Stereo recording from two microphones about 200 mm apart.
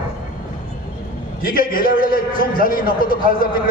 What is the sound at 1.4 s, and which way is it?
A man's voice, 45° left (ahead or behind).